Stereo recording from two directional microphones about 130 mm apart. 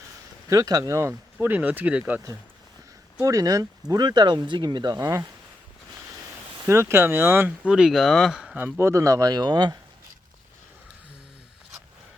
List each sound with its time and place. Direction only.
0.4 s speech: 25° right (ahead or behind); by 2.2 s 10° right (ahead or behind)
3.2 s speech: 25° right (ahead or behind)
6.7 s speech: 20° right (ahead or behind)
8.8 s speech: 25° right (ahead or behind)